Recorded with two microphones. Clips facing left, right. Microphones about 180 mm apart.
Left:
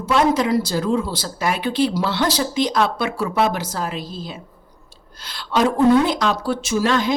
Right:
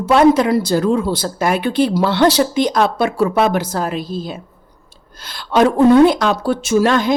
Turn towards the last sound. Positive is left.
turn(degrees=-55)  # may be behind; listen again after turning